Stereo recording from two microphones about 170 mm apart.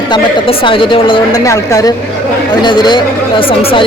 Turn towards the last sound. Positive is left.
turn(degrees=30)  # may be behind; listen again after turning